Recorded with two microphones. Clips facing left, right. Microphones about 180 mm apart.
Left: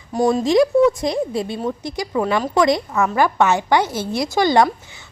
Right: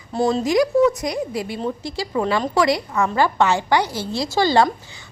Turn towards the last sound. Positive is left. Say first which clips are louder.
# left 2 dB
turn(degrees=20)  # may be behind; listen again after turning